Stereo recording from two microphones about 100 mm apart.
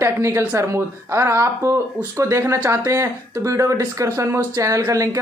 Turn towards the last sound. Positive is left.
turn(degrees=-35)  # may be behind; listen again after turning